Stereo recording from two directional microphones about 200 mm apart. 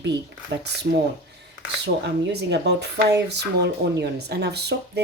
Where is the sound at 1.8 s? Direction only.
55° right (ahead or behind).